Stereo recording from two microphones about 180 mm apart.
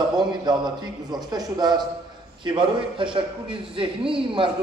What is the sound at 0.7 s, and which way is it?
A man's voice, 20° right (ahead or behind).